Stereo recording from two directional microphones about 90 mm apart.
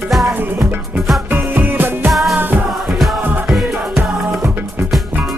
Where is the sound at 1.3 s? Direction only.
20° right (ahead or behind).